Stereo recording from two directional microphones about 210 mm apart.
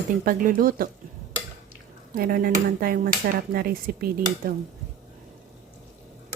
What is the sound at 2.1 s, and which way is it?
Speech, 45° right (ahead or behind).